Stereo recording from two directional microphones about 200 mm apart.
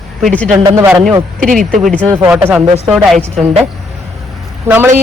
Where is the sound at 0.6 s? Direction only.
15° right (ahead or behind).